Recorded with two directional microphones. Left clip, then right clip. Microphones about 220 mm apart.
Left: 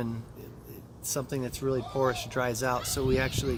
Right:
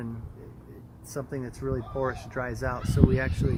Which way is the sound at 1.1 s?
55° left (ahead or behind).